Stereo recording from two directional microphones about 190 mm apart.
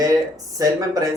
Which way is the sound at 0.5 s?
20° right (ahead or behind).